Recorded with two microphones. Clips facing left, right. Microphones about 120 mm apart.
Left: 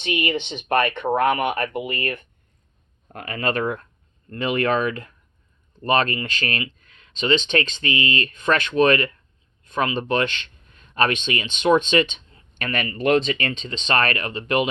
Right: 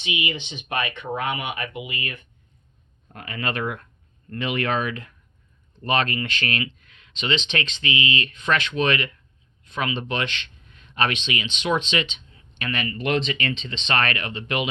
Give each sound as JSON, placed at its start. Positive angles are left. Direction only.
{"t": 0.0, "sound": "speech", "side_deg": 50}